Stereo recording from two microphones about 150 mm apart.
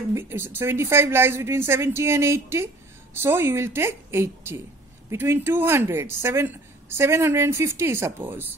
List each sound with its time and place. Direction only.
0.1 s speech: 15° right (ahead or behind)